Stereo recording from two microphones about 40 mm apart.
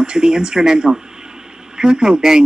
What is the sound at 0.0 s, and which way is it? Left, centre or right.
Speech, centre.